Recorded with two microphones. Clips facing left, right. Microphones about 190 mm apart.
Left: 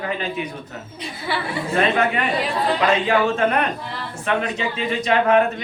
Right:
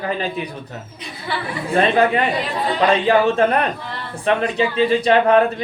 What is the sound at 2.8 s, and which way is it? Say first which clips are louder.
Speech: right 5 dB; 35° right (ahead or behind).